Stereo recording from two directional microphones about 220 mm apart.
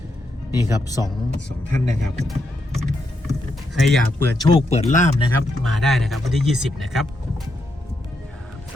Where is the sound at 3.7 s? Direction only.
Centre (ahead or behind); by 5.2 s 30° left (ahead or behind).